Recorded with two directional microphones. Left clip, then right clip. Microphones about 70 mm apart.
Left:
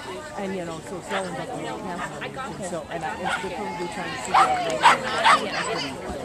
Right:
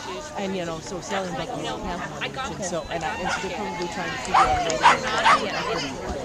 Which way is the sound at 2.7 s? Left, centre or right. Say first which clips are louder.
Right 2 dB; right.